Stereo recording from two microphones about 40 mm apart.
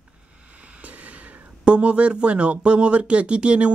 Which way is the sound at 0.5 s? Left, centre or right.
Right.